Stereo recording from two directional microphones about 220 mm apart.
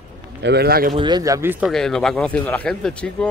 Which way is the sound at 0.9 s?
20° right (ahead or behind).